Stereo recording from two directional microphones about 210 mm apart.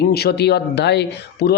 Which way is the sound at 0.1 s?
50° left (ahead or behind).